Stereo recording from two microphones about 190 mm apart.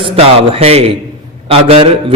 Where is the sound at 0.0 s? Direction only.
30° right (ahead or behind).